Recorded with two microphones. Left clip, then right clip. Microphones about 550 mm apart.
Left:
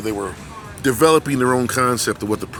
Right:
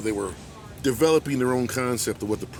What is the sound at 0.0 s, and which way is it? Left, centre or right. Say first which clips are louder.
Speech: left 3 dB; right.